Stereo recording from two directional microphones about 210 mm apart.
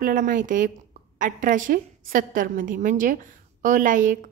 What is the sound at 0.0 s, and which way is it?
A woman's voice, 40° right (ahead or behind).